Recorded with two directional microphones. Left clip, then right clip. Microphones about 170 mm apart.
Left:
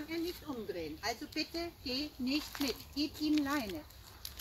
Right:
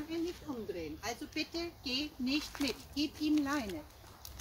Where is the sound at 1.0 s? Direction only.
15° right (ahead or behind).